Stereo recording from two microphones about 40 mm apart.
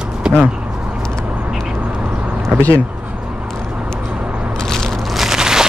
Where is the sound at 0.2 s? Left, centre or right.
Right.